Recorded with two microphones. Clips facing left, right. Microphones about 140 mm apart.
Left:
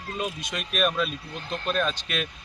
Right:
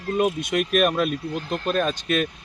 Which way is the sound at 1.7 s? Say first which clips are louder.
Right 4 dB; 45° right (ahead or behind).